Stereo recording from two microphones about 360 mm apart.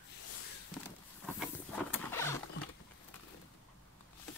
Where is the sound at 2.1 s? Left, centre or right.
Centre.